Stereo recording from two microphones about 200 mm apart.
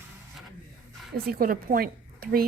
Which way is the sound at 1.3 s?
45° right (ahead or behind).